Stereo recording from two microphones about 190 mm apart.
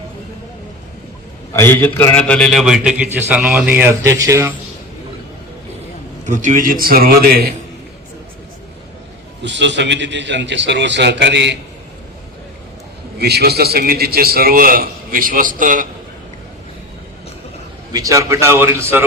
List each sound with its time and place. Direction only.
1.5 s a man's voice: 10° left (ahead or behind); by 4.5 s 15° right (ahead or behind)
6.2 s a man's voice: 40° right (ahead or behind)
9.4 s a man's voice: 70° right (ahead or behind)
13.1 s a man's voice: 60° right (ahead or behind)
17.9 s a man's voice: 15° right (ahead or behind)